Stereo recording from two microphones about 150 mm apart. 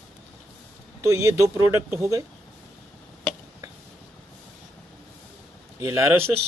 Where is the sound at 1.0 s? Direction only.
20° right (ahead or behind).